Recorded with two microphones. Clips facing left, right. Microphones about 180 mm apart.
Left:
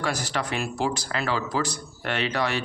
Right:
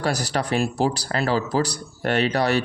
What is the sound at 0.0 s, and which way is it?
Speech, 40° right (ahead or behind).